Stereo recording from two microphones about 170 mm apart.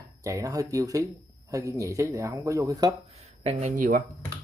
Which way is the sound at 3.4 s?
45° right (ahead or behind).